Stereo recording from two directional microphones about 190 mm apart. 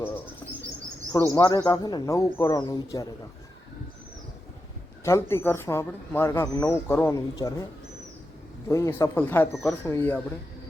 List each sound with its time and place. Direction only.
1.1 s a man's voice: 20° left (ahead or behind)
5.0 s speech: 15° left (ahead or behind)
8.7 s speech: 15° left (ahead or behind)